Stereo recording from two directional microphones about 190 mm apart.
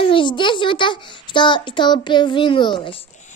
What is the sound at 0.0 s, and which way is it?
A child's voice, 25° left (ahead or behind).